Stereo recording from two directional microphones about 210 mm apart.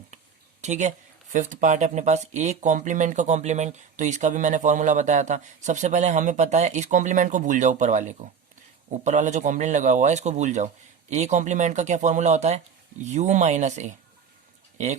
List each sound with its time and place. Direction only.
0.6 s speech: 35° right (ahead or behind)